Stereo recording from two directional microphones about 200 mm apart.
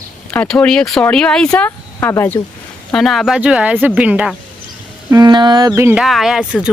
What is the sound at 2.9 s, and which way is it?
Speech, centre (ahead or behind).